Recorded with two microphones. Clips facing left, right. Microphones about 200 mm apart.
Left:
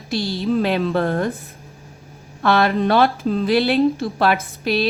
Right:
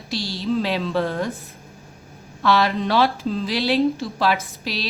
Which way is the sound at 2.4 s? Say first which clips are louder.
Left 3 dB; 55° left (ahead or behind).